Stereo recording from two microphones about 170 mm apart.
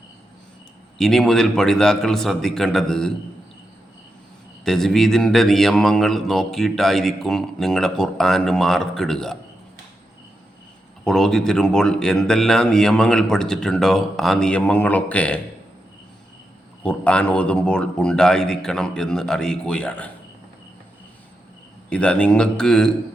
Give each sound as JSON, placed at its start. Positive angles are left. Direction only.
{"t": 0.9, "sound": "speech", "side_deg": 0}
{"t": 4.6, "sound": "speech", "side_deg": 0}
{"t": 11.0, "sound": "speech", "side_deg": 0}
{"t": 16.8, "sound": "speech", "side_deg": 5}
{"t": 21.8, "sound": "speech", "side_deg": 5}